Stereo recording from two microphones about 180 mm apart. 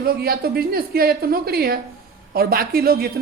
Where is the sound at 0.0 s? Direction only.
55° right (ahead or behind).